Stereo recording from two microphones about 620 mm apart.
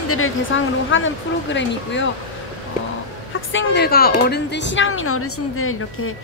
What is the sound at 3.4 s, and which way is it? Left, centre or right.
Speech, centre.